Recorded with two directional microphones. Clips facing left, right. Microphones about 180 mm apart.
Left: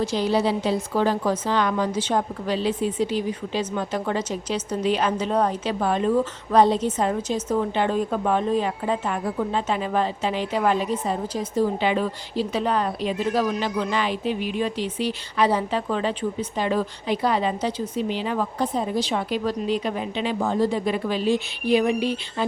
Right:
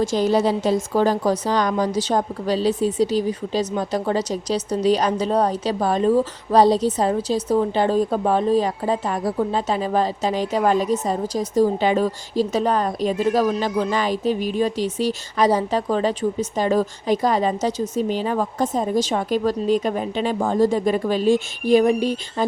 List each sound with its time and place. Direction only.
0.0 s a woman's voice: 45° right (ahead or behind)